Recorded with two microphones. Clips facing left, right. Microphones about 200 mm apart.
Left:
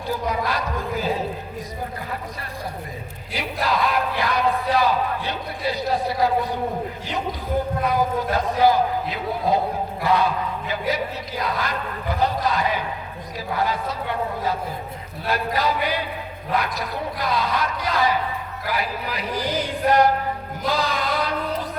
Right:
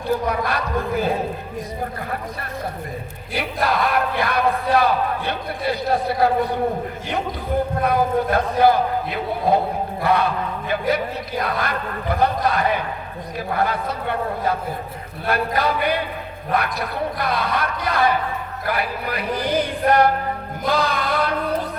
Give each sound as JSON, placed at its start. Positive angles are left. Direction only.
{"t": 0.1, "sound": "speech", "side_deg": -55}
{"t": 3.3, "sound": "speech", "side_deg": -55}
{"t": 7.8, "sound": "speech", "side_deg": -55}
{"t": 20.7, "sound": "music", "side_deg": -55}